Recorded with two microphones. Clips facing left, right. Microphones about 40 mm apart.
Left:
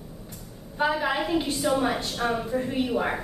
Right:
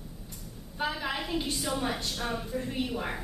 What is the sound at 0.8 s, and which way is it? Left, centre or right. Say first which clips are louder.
A woman's voice: left 7 dB; centre.